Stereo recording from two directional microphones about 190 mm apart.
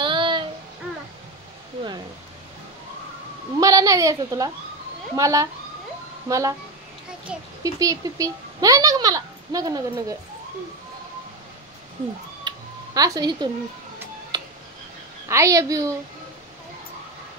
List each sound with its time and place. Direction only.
0.0 s child singing: 25° right (ahead or behind)
3.5 s a sound: 20° right (ahead or behind)
5.1 s a woman's voice: 15° right (ahead or behind)
7.3 s a child's voice: 5° right (ahead or behind)
7.6 s speech: 20° right (ahead or behind)
12.4 s music: 20° right (ahead or behind)
15.2 s a woman's voice: 15° right (ahead or behind)